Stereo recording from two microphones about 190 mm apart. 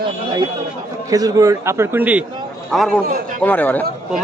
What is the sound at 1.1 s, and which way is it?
A man's voice, 20° right (ahead or behind).